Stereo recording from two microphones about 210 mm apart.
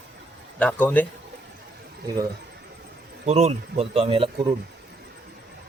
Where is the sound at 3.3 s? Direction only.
30° right (ahead or behind).